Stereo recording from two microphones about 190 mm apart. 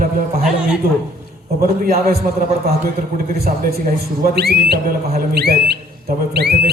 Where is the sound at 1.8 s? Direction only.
50° right (ahead or behind).